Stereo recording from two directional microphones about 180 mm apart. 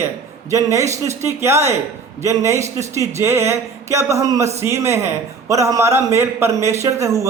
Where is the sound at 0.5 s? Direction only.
15° right (ahead or behind).